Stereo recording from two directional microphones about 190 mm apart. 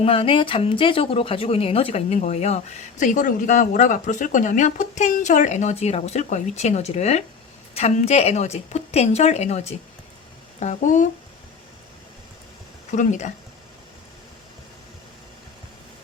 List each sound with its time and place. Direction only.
0.0 s speech: 30° left (ahead or behind)
12.9 s speech: 40° left (ahead or behind)